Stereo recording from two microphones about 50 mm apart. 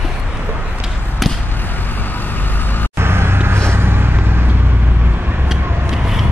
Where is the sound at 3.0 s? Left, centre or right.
Right.